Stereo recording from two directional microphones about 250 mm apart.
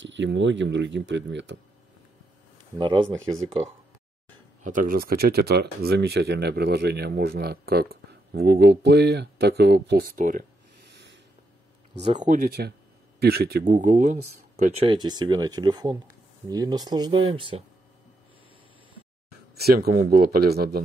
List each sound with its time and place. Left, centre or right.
0.0 s speech: right
2.8 s speech: centre
4.6 s speech: right
12.0 s speech: centre
12.3 s speech: right; by 17.6 s centre
19.6 s speech: right